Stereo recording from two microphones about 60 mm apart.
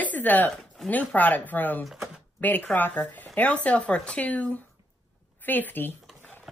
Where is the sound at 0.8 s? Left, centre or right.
Left.